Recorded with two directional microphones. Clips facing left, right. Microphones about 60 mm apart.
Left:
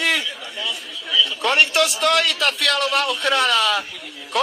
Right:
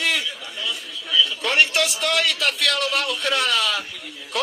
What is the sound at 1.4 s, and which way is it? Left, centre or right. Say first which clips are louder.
Speech: left 5 dB; left.